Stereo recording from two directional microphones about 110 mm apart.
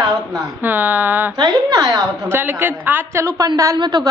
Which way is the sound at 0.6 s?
15° right (ahead or behind).